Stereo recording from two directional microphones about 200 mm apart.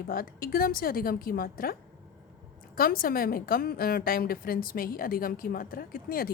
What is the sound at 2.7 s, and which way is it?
A woman's voice, 45° left (ahead or behind).